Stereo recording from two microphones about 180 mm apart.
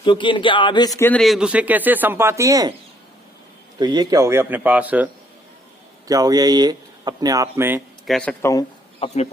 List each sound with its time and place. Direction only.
0.0 s a man's voice: 25° left (ahead or behind)
0.9 s speech: 10° left (ahead or behind)
1.2 s speech: centre (ahead or behind); by 2.7 s 20° right (ahead or behind)
3.8 s speech: 20° right (ahead or behind)
6.1 s speech: 20° right (ahead or behind)
8.0 s speech: 5° left (ahead or behind)
9.0 s speech: 30° left (ahead or behind)